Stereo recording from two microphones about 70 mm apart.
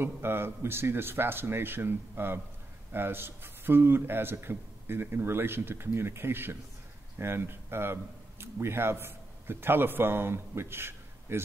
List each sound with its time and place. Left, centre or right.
0.0 s a man's voice: right